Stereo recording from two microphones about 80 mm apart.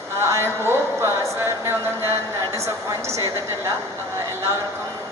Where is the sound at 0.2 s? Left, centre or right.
Right.